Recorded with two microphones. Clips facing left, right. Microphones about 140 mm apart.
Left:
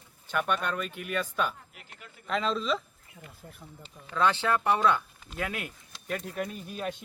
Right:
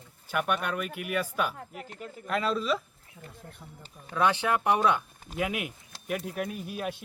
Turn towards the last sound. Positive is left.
turn(degrees=-10)  # may be behind; listen again after turning